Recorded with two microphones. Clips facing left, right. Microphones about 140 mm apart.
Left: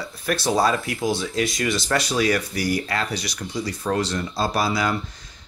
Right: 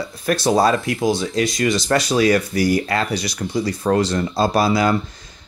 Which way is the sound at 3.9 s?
40° right (ahead or behind).